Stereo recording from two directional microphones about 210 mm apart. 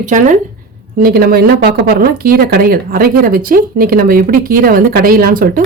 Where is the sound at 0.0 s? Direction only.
40° right (ahead or behind).